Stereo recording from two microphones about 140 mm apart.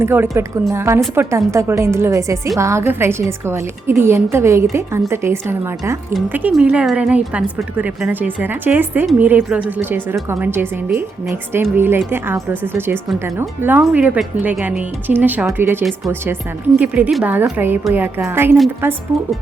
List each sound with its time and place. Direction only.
0.0 s a woman's voice: 15° right (ahead or behind)